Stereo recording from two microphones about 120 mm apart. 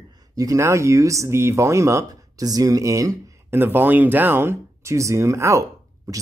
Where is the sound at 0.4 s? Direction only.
25° right (ahead or behind).